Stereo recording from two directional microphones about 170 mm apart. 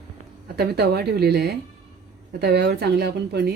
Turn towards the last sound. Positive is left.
turn(degrees=-70)  # may be behind; listen again after turning